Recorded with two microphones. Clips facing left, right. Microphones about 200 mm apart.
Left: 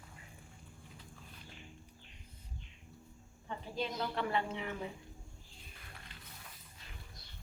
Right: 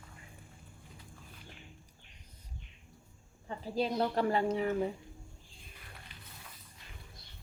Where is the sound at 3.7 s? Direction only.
40° right (ahead or behind).